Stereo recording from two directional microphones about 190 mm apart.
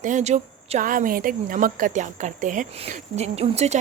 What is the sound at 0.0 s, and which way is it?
Speech, 40° right (ahead or behind).